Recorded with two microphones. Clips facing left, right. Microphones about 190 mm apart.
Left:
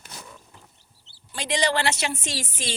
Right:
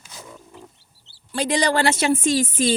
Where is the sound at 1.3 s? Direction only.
45° right (ahead or behind).